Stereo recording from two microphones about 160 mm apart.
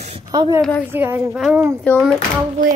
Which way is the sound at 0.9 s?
15° right (ahead or behind).